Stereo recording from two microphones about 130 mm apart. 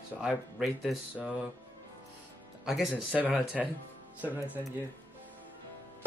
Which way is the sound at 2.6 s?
5° right (ahead or behind).